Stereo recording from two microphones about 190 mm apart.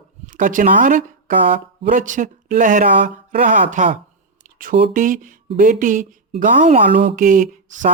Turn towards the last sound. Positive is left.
turn(degrees=-45)  # may be behind; listen again after turning